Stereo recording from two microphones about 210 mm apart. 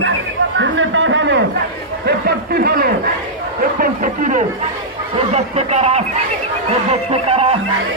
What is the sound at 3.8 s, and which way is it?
Speech, 35° right (ahead or behind).